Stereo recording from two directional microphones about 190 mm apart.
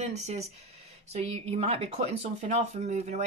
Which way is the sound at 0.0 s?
35° right (ahead or behind).